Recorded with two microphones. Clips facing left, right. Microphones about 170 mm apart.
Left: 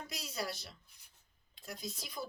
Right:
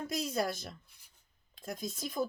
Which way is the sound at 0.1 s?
50° right (ahead or behind).